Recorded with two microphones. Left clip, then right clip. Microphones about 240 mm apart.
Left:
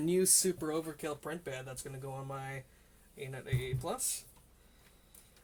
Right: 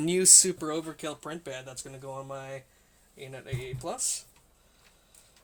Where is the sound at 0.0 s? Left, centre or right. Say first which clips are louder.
Right 7 dB; right.